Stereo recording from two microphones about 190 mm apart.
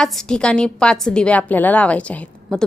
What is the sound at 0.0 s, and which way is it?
A woman's voice, 5° left (ahead or behind).